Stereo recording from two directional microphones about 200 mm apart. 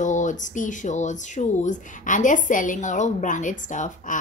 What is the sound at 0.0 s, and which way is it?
Speech, 40° left (ahead or behind).